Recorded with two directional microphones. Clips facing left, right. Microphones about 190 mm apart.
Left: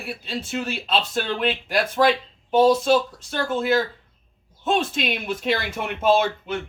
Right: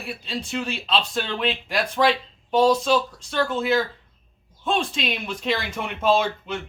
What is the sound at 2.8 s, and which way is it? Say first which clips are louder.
Speech: left 2 dB; 50° left (ahead or behind).